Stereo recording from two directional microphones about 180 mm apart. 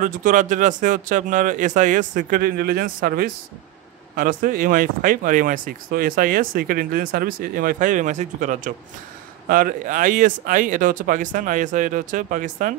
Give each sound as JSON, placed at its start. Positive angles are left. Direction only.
{"t": 0.0, "sound": "speech", "side_deg": -45}